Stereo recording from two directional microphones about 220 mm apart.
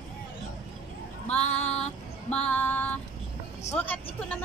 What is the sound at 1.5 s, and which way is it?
Female singing, 30° left (ahead or behind).